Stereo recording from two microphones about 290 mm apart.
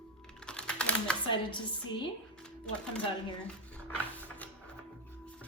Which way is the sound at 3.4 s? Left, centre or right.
Centre.